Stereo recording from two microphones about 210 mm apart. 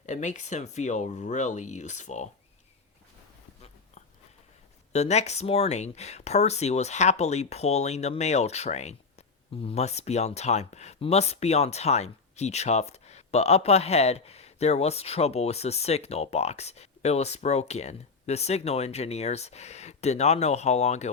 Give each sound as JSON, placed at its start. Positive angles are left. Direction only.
{"t": 0.0, "sound": "speech", "side_deg": 35}
{"t": 4.9, "sound": "speech", "side_deg": 30}